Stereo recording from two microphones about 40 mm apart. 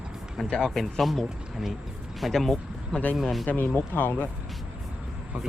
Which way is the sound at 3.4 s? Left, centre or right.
Left.